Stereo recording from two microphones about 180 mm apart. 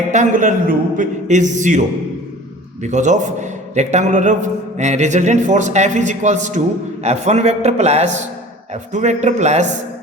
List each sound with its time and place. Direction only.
0.1 s a man's voice: 45° right (ahead or behind)
2.8 s a man's voice: 40° right (ahead or behind)